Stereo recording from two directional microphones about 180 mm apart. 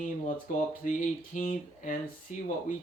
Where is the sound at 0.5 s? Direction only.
45° left (ahead or behind).